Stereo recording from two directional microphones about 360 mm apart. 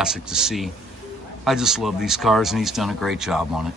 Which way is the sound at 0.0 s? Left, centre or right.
Centre.